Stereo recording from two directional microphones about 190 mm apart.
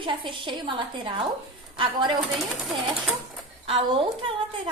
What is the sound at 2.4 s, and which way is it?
Speech, centre (ahead or behind).